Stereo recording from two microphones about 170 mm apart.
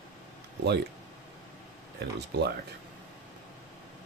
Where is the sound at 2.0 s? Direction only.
75° right (ahead or behind).